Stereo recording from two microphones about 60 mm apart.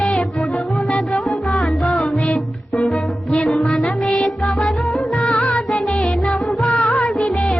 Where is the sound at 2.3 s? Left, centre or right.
Left.